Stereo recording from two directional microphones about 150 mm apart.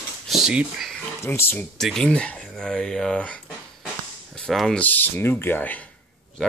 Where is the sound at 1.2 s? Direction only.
15° left (ahead or behind).